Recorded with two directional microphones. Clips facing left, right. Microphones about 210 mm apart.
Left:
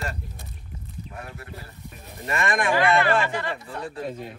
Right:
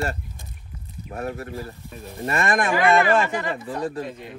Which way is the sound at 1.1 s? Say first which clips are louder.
Right 12 dB; 45° right (ahead or behind).